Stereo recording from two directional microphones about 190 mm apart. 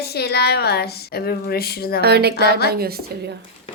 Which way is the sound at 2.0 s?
60° right (ahead or behind).